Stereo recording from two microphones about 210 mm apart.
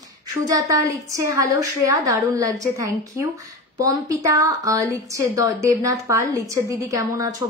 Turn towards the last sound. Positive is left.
turn(degrees=-15)  # may be behind; listen again after turning